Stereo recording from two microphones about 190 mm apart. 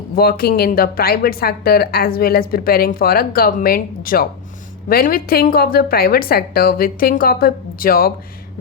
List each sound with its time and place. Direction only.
0.2 s a woman's voice: 55° left (ahead or behind)